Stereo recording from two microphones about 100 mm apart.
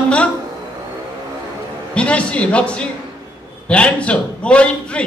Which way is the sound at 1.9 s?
10° left (ahead or behind).